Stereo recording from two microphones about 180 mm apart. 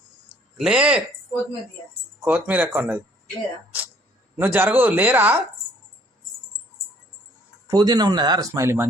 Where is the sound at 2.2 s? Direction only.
10° right (ahead or behind).